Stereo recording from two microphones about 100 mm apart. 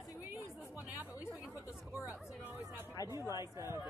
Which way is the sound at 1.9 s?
30° left (ahead or behind).